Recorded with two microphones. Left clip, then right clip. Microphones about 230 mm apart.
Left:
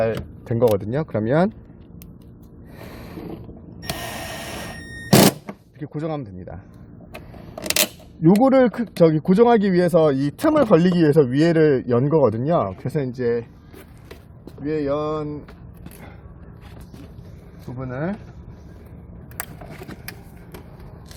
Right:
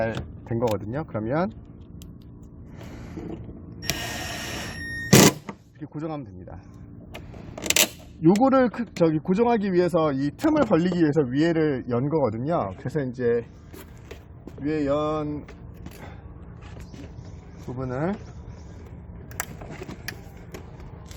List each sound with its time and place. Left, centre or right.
0.5 s speech: left
2.9 s a sound: left
3.8 s a sound: centre
5.8 s speech: left
8.2 s speech: left
14.6 s speech: centre
17.7 s speech: centre
19.9 s vehicle: centre